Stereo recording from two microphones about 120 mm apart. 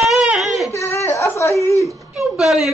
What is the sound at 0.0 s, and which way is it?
Baby cry, 5° right (ahead or behind).